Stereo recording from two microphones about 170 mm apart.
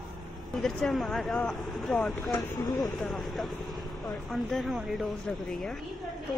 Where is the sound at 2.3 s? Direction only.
25° left (ahead or behind).